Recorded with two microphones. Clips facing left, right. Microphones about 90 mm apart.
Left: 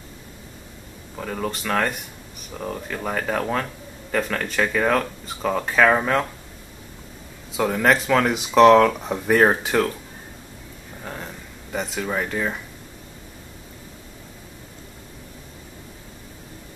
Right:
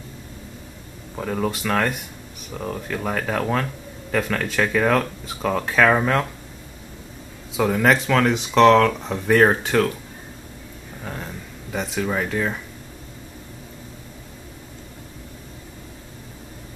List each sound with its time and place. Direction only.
1.1 s speech: 5° right (ahead or behind)
7.5 s speech: centre (ahead or behind)
11.1 s a sound: centre (ahead or behind)